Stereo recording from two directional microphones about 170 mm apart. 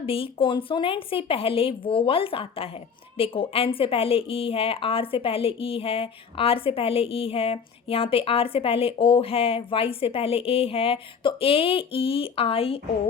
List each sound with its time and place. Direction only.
0.0 s speech: 35° left (ahead or behind)